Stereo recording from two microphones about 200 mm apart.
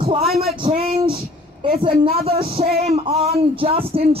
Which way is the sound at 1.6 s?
30° right (ahead or behind).